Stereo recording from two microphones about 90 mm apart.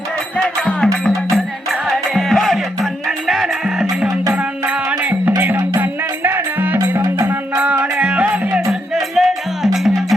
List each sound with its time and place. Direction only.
0.3 s music: 10° left (ahead or behind)
1.9 s music: centre (ahead or behind)
4.4 s music: 15° right (ahead or behind)
6.7 s music: 30° right (ahead or behind)
7.5 s music: 20° right (ahead or behind)
9.0 s music: centre (ahead or behind)